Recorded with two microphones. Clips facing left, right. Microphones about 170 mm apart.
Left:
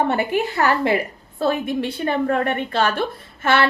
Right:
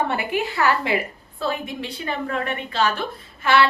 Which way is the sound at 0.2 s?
40° left (ahead or behind).